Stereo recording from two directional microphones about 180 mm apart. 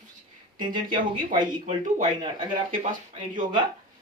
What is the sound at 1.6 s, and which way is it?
Speech, 40° right (ahead or behind).